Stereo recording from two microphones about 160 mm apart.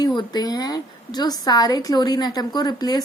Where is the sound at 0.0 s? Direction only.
25° left (ahead or behind).